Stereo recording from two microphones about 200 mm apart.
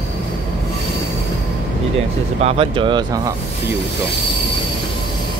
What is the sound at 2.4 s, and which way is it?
Speech, 30° right (ahead or behind).